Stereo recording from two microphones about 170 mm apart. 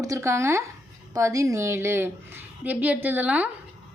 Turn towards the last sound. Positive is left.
turn(degrees=-10)  # may be behind; listen again after turning